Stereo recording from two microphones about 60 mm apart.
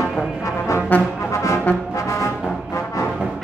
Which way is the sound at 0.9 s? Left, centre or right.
Left.